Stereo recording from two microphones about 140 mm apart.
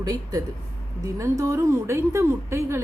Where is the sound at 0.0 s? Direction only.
25° right (ahead or behind).